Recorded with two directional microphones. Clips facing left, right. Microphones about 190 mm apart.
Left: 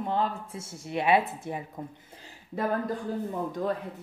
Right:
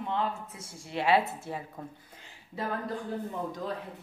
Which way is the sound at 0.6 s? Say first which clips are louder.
Left 2 dB; 20° left (ahead or behind).